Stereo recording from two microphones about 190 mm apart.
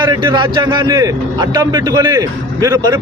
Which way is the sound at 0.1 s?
25° right (ahead or behind).